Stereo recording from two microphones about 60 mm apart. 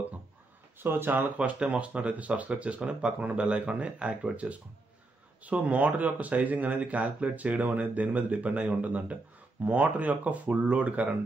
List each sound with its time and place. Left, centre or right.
0.7 s speech: right
1.4 s speech: centre